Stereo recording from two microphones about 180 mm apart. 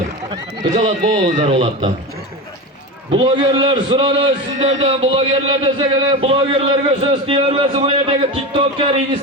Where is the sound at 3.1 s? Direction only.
25° right (ahead or behind).